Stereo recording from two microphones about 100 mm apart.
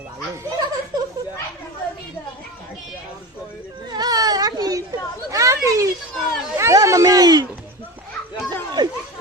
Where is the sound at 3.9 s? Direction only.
40° right (ahead or behind).